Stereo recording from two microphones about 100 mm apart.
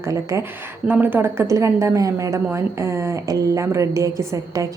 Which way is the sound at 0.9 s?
20° right (ahead or behind).